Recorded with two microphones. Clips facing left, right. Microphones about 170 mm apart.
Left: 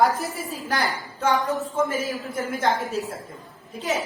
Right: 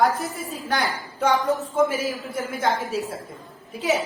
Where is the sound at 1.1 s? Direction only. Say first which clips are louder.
Right 2 dB; 15° right (ahead or behind).